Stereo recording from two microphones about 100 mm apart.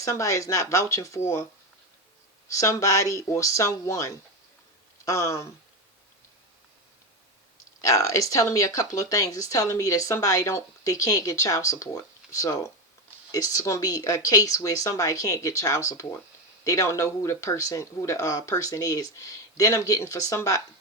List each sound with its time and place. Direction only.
0.0 s speech: 35° left (ahead or behind)
2.5 s speech: 30° left (ahead or behind)
7.8 s speech: 35° left (ahead or behind)